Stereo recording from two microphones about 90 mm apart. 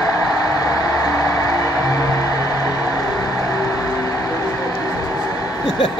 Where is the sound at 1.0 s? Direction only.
35° left (ahead or behind).